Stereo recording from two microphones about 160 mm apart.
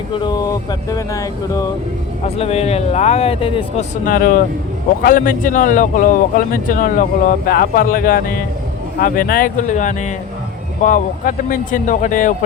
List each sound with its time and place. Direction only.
0.2 s music: 25° left (ahead or behind)
2.2 s speech: 40° left (ahead or behind)
4.0 s speech: 60° left (ahead or behind)